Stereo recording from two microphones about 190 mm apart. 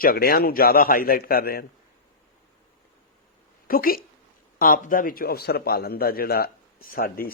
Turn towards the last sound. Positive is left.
turn(degrees=50)  # may be behind; listen again after turning